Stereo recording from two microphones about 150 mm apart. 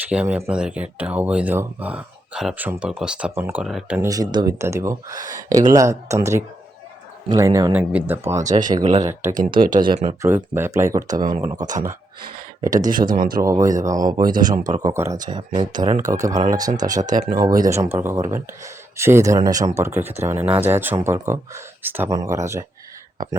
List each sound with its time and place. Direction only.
0.1 s speech: 5° right (ahead or behind)
4.0 s speech: 25° right (ahead or behind)
8.4 s speech: 60° right (ahead or behind)
9.0 s speech: 20° right (ahead or behind)
9.3 s speech: 65° right (ahead or behind)
10.2 s speech: 15° right (ahead or behind)
12.7 s speech: 60° right (ahead or behind)
13.4 s speech: 20° right (ahead or behind)
14.3 s speech: 65° right (ahead or behind)
14.8 s speech: 20° right (ahead or behind)
17.2 s speech: 65° right (ahead or behind)
17.6 s speech: 20° right (ahead or behind)